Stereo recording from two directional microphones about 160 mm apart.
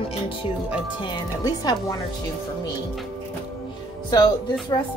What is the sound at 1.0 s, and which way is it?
Speech, 25° left (ahead or behind).